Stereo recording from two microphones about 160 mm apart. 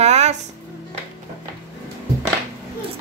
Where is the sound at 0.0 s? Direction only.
45° right (ahead or behind).